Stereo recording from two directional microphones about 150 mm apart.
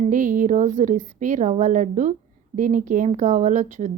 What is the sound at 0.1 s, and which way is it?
A woman's voice, 60° right (ahead or behind).